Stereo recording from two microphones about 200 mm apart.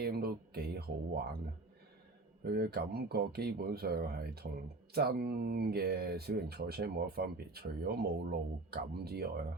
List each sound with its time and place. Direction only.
0.0 s speech: 50° right (ahead or behind)
2.4 s speech: 50° right (ahead or behind)